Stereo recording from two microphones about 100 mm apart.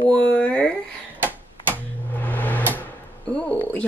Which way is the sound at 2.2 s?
15° left (ahead or behind).